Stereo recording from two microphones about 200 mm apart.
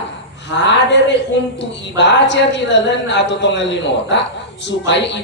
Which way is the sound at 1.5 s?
60° left (ahead or behind).